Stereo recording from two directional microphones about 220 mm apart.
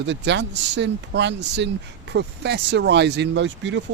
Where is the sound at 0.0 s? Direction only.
55° right (ahead or behind).